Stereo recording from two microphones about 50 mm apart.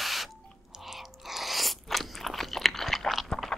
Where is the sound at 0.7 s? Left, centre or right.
Centre.